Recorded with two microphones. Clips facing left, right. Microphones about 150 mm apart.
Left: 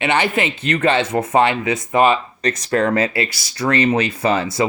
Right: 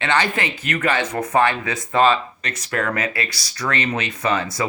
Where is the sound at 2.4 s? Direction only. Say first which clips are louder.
Left 10 dB; 40° left (ahead or behind).